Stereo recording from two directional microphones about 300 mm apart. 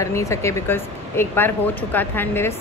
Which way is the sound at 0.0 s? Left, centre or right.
Centre.